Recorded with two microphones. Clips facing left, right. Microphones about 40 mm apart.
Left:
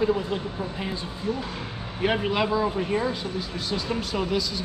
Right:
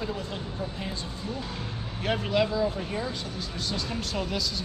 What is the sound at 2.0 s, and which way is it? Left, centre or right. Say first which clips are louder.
A man's voice: left 2 dB; centre.